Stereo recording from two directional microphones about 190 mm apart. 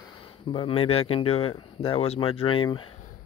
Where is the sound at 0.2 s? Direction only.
30° left (ahead or behind).